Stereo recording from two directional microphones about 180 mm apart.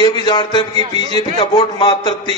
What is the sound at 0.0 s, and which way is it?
A man's voice, 25° left (ahead or behind).